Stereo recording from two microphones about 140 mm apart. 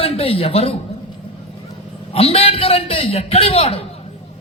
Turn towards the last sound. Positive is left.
turn(degrees=45)  # may be behind; listen again after turning